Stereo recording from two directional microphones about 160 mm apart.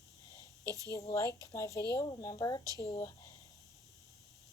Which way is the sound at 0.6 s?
20° right (ahead or behind).